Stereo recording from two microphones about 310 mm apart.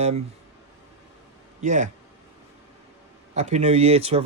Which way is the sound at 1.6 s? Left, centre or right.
Right.